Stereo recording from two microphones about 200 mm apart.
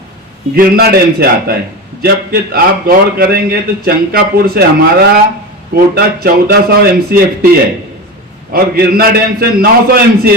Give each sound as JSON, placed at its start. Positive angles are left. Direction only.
{"t": 0.5, "sound": "a man's voice", "side_deg": -50}
{"t": 8.5, "sound": "a man's voice", "side_deg": -50}